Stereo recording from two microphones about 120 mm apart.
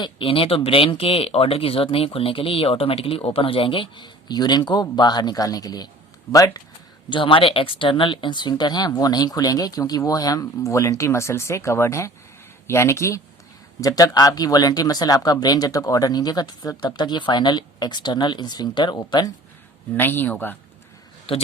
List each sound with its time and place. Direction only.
0.0 s speech: 50° left (ahead or behind); by 6.6 s 30° left (ahead or behind)
7.1 s speech: 45° left (ahead or behind)
20.0 s a man's voice: 15° left (ahead or behind)
21.3 s speech: 45° left (ahead or behind)